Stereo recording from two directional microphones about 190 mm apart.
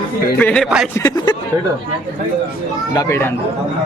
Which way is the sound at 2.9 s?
15° left (ahead or behind).